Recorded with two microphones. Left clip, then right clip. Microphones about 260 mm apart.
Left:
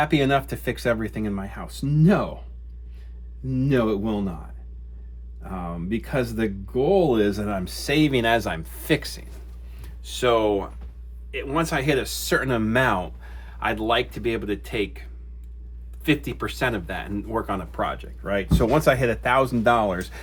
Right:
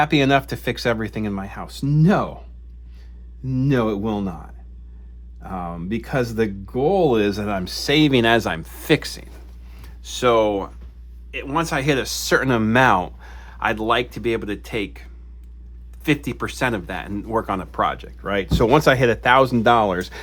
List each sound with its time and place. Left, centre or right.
0.0 s speech: right
3.5 s speech: right
5.4 s speech: right